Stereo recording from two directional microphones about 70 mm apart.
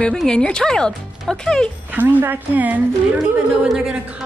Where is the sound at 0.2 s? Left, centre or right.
Centre.